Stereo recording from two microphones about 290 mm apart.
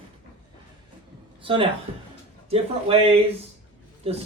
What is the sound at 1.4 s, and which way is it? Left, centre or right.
Speech, centre.